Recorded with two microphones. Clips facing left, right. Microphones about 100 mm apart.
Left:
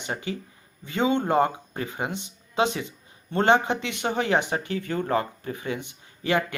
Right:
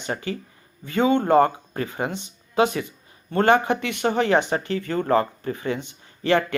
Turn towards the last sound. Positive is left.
turn(degrees=10)  # may be behind; listen again after turning